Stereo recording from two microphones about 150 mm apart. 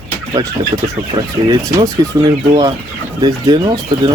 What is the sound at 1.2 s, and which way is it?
Speech, 30° right (ahead or behind).